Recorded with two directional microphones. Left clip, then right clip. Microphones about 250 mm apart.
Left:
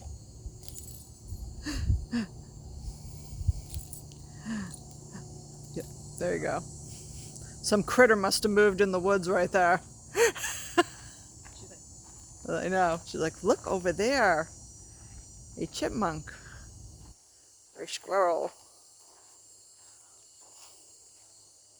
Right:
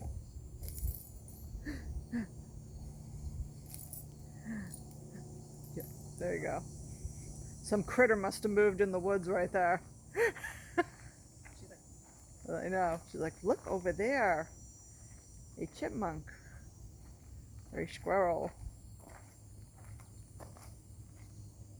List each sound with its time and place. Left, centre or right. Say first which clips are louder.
1.6 s a sound: left 8 dB; left
4.4 s a sound: left 7 dB; left
5.7 s cricket: left 7 dB; left
7.6 s speech: left 7 dB; left
11.4 s cricket: left 4 dB; centre
12.5 s speech: left 7 dB; left
15.5 s cricket: left 7 dB; left
17.8 s speech: left 5 dB; left